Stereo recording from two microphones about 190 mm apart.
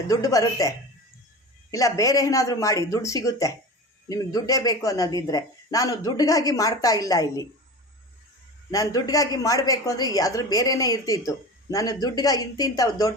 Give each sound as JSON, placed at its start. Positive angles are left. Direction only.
{"t": 0.1, "sound": "speech", "side_deg": 15}
{"t": 1.7, "sound": "a woman's voice", "side_deg": 15}
{"t": 8.7, "sound": "a woman's voice", "side_deg": 20}